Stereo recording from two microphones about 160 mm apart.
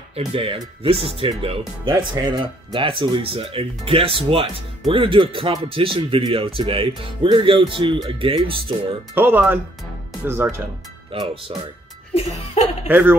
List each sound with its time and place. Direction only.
0.3 s speech: 35° right (ahead or behind)
9.1 s speech: 10° right (ahead or behind)
11.1 s speech: 35° right (ahead or behind)
12.1 s music: 45° left (ahead or behind)
12.8 s speech: 10° right (ahead or behind)